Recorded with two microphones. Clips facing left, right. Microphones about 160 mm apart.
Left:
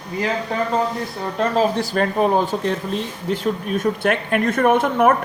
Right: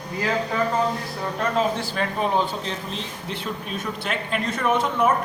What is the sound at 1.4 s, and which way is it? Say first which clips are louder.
Speech: left 5 dB; 35° left (ahead or behind).